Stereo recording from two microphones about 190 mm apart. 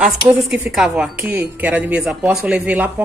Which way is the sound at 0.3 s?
Centre (ahead or behind).